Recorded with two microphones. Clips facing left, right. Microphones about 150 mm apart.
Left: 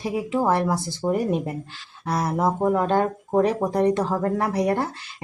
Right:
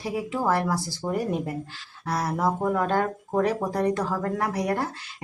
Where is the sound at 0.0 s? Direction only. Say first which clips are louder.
Left 4 dB; 20° left (ahead or behind).